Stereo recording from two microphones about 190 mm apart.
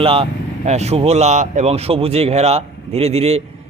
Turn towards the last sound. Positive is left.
turn(degrees=-35)  # may be behind; listen again after turning